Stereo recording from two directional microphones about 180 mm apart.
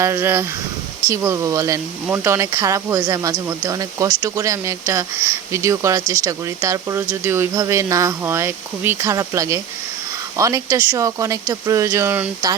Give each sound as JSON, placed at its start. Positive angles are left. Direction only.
{"t": 0.0, "sound": "speech", "side_deg": -15}